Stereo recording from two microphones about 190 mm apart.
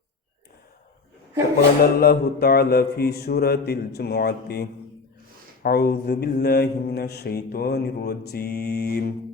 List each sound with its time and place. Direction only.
1.8 s mantra: 55° left (ahead or behind)